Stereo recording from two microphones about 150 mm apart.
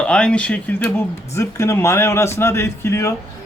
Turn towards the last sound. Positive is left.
turn(degrees=15)  # may be behind; listen again after turning